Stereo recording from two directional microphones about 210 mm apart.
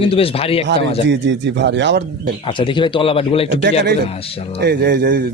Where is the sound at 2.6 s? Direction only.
25° left (ahead or behind).